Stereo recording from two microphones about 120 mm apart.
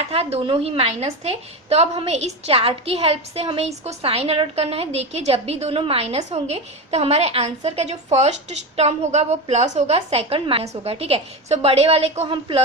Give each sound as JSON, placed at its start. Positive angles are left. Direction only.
{"t": 0.1, "sound": "a woman's voice", "side_deg": -55}